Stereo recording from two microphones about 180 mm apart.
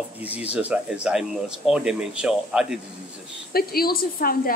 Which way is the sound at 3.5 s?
55° left (ahead or behind).